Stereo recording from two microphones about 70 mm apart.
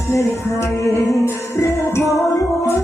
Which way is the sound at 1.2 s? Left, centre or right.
Left.